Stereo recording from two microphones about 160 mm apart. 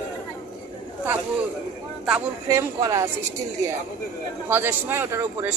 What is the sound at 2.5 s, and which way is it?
Speech, 20° right (ahead or behind).